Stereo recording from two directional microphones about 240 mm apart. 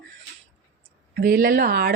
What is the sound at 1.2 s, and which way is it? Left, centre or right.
Speech, right.